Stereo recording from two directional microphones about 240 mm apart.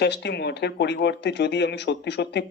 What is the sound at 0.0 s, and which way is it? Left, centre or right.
Speech, left.